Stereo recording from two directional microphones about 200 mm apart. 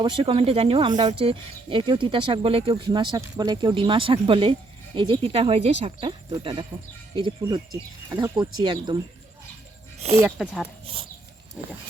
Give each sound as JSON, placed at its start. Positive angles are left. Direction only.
{"t": 0.0, "sound": "speech", "side_deg": -25}
{"t": 10.2, "sound": "speech", "side_deg": -5}
{"t": 10.9, "sound": "speech", "side_deg": -25}